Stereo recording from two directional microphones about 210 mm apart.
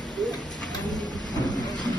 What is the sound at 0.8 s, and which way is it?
Vehicle, 20° left (ahead or behind).